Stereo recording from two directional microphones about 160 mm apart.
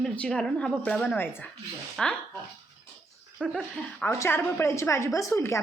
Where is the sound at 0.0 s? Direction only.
5° left (ahead or behind).